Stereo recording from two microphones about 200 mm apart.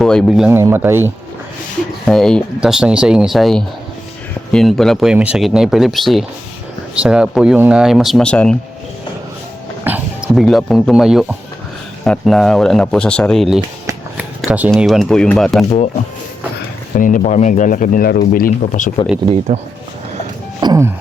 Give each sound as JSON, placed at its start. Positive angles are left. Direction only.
{"t": 0.0, "sound": "speech", "side_deg": 0}
{"t": 2.0, "sound": "speech", "side_deg": 0}
{"t": 9.8, "sound": "speech", "side_deg": -5}
{"t": 17.0, "sound": "a man's voice", "side_deg": 40}
{"t": 19.5, "sound": "speech", "side_deg": -35}
{"t": 20.6, "sound": "music", "side_deg": -20}